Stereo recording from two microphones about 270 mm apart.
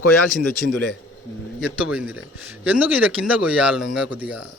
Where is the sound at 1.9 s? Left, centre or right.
Centre.